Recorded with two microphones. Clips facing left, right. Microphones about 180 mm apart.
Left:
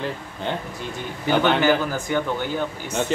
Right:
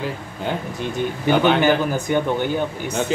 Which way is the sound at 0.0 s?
5° right (ahead or behind).